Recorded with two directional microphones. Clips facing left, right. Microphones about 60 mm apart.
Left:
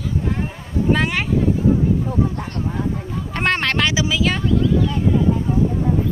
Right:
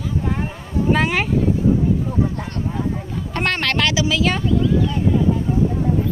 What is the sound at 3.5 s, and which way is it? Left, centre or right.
Speech, left.